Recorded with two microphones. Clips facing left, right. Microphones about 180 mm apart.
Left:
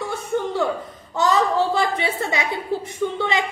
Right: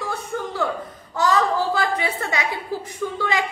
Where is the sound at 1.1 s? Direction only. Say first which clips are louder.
Left 1 dB; 20° left (ahead or behind).